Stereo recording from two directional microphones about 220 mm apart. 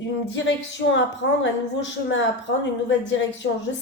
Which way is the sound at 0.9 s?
55° left (ahead or behind).